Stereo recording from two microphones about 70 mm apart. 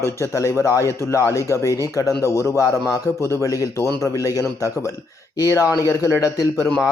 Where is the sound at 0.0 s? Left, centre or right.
Left.